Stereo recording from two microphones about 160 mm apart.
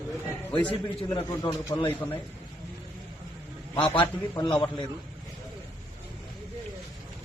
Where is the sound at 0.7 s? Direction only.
30° left (ahead or behind).